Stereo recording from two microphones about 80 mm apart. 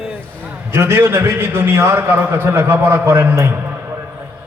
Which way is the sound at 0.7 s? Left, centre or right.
Right.